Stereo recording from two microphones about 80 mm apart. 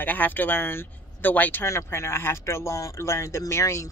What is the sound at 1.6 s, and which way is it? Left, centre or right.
Speech, left.